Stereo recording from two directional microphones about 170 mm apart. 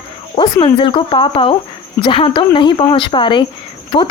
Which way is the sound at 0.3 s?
30° left (ahead or behind).